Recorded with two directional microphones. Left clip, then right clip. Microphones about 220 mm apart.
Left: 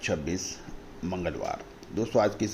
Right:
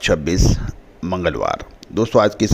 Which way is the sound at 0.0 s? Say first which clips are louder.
Right 13 dB; 45° right (ahead or behind).